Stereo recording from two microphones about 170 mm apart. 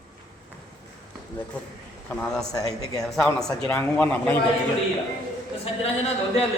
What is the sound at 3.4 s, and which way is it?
Speech, 10° left (ahead or behind).